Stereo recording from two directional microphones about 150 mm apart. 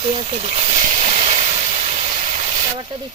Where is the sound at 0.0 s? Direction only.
40° right (ahead or behind).